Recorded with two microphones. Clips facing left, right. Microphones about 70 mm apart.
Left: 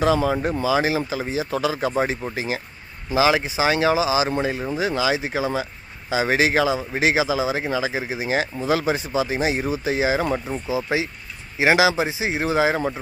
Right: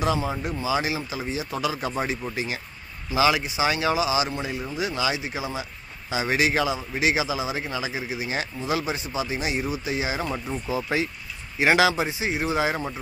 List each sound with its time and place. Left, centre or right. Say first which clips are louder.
0.0 s speech: left 6 dB; left
0.7 s speech: left 4 dB; left
10.7 s speech: left 3 dB; centre; by 12.9 s left